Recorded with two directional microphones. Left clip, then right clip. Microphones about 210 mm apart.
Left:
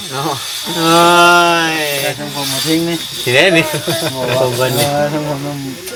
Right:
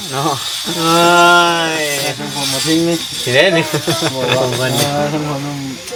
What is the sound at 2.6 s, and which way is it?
Speech, 20° left (ahead or behind).